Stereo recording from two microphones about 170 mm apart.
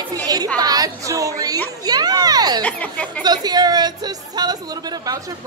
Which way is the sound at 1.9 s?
25° right (ahead or behind).